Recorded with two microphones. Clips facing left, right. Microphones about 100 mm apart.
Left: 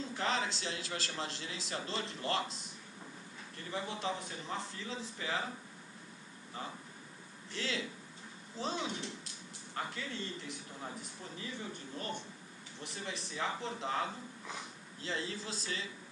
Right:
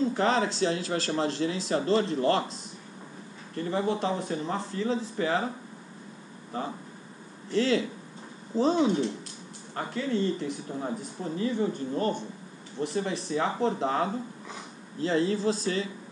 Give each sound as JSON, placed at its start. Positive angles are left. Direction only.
{"t": 0.1, "sound": "speech", "side_deg": -45}
{"t": 3.5, "sound": "speech", "side_deg": -45}
{"t": 6.5, "sound": "speech", "side_deg": -50}